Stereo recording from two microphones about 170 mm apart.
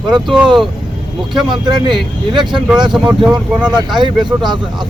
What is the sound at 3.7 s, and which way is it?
Speech, 25° right (ahead or behind).